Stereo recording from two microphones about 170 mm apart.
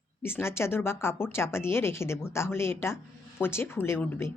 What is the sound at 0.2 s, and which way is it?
Speech, 15° left (ahead or behind).